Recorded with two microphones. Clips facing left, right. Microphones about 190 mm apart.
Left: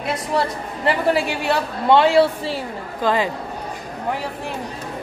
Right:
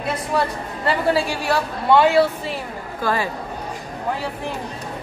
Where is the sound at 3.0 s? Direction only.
20° left (ahead or behind).